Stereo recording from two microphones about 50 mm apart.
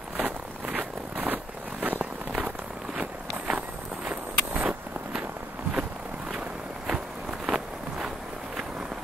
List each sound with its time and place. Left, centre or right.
0.2 s zipper: right
4.1 s a sound: right
6.9 s walk: centre